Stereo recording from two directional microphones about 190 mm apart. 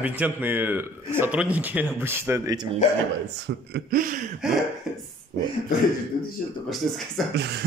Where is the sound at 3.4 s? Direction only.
55° right (ahead or behind).